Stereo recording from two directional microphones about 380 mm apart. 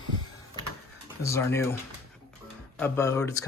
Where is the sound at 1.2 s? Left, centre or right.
Centre.